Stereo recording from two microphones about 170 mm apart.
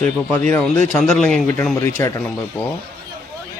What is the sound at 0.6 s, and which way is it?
Speech, 5° left (ahead or behind).